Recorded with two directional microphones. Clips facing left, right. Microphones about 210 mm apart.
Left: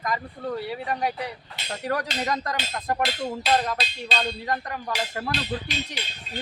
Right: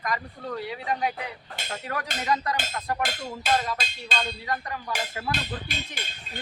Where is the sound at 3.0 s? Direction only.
50° right (ahead or behind).